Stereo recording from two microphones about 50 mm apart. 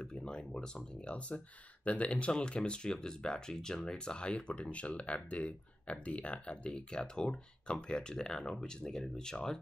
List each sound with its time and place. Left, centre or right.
0.0 s speech: centre
1.9 s speech: left